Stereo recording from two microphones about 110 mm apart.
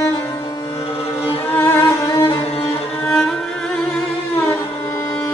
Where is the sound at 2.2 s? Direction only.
60° left (ahead or behind).